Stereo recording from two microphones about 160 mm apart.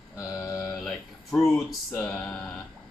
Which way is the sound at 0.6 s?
Centre (ahead or behind).